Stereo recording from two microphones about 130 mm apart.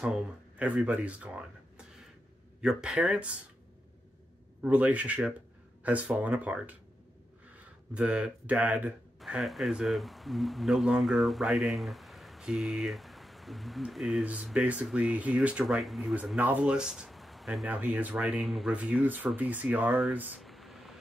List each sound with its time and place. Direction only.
0.0 s speech: 10° right (ahead or behind)
4.6 s speech: 10° right (ahead or behind)
7.9 s speech: 10° right (ahead or behind)
9.2 s speech: centre (ahead or behind)
16.3 s speech: 10° right (ahead or behind)
17.6 s speech: 10° right (ahead or behind)
20.3 s a sound: centre (ahead or behind)